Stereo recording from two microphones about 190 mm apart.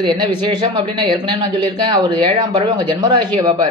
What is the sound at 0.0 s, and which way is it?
A man's voice, 25° right (ahead or behind).